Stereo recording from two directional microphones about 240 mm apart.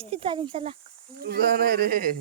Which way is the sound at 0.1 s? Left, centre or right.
Right.